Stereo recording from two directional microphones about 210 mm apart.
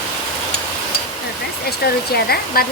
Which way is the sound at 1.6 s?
50° left (ahead or behind).